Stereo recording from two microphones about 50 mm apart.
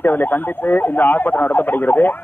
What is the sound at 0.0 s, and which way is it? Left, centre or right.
A man's voice, left.